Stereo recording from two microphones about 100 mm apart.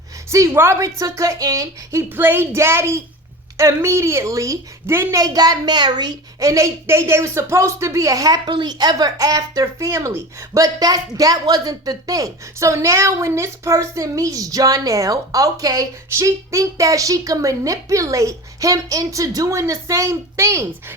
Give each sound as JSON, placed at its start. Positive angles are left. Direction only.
{"t": 0.3, "sound": "a woman's voice", "side_deg": -30}